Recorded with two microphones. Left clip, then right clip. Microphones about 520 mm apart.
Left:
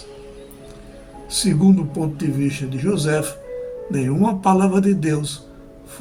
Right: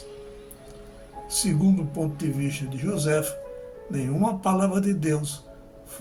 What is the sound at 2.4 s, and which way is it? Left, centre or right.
Music, right.